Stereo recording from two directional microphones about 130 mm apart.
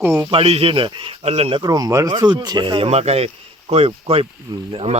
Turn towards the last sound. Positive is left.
turn(degrees=-50)  # may be behind; listen again after turning